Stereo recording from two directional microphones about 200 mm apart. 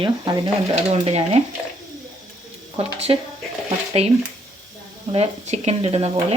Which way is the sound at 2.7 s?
30° right (ahead or behind).